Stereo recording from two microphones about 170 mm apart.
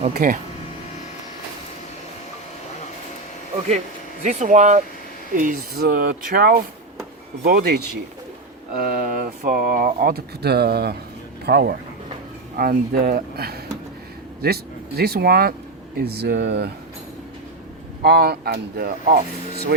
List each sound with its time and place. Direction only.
0.0 s speech: 45° right (ahead or behind)
4.2 s speech: 45° right (ahead or behind); by 16.7 s 80° right
18.0 s speech: 70° right (ahead or behind)